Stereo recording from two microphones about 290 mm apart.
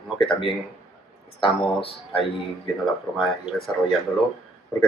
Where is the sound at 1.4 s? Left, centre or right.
Centre.